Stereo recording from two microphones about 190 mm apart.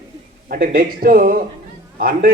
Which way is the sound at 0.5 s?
50° right (ahead or behind).